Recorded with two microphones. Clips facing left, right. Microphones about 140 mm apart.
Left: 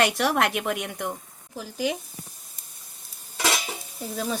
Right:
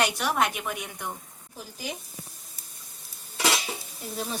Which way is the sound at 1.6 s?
90° left.